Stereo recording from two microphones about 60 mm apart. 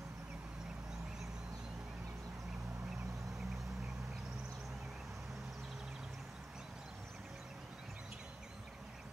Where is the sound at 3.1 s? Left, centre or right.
Right.